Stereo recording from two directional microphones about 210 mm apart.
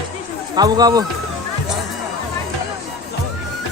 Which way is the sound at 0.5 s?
20° right (ahead or behind).